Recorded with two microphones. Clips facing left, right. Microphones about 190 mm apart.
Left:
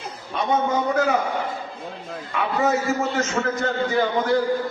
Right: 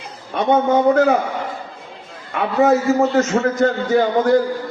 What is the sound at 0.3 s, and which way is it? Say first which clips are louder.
Speech: right 6 dB; 60° right (ahead or behind).